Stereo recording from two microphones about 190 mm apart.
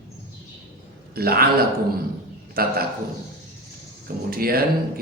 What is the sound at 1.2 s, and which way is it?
Speech, 55° right (ahead or behind).